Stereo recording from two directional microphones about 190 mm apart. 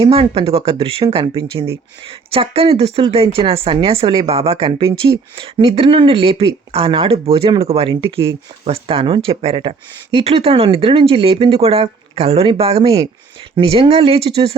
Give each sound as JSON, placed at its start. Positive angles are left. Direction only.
{"t": 0.0, "sound": "speech", "side_deg": -30}